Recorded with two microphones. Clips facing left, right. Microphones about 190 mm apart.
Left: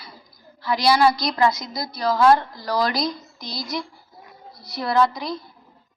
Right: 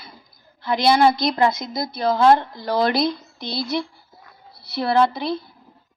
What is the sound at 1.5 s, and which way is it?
Speech, 55° right (ahead or behind).